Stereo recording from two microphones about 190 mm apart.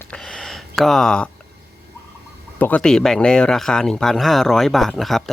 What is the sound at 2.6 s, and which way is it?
Speech, 10° left (ahead or behind).